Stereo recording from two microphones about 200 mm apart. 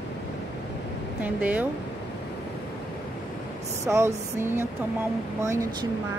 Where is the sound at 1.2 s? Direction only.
10° right (ahead or behind).